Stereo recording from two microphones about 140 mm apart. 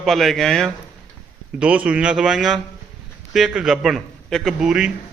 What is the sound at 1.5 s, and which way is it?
A man's voice, 10° right (ahead or behind).